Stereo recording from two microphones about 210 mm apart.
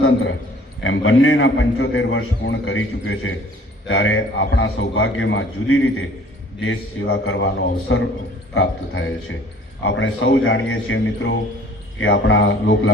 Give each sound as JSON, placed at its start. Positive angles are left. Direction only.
{"t": 0.8, "sound": "a man's voice", "side_deg": 70}